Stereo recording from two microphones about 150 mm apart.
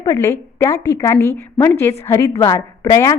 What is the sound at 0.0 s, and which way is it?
A woman's voice, 20° left (ahead or behind).